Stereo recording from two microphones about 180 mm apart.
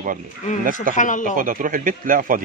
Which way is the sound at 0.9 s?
45° left (ahead or behind).